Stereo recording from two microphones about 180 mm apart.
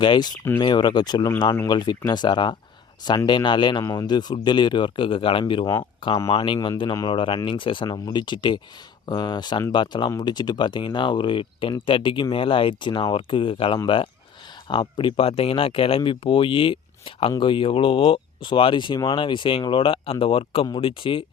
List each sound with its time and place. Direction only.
0.0 s speech: 25° left (ahead or behind)